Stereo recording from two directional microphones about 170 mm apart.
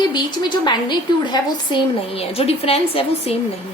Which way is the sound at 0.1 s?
25° left (ahead or behind).